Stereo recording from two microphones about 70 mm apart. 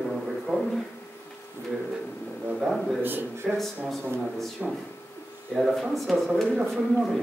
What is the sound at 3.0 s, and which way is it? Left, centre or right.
Speech, right.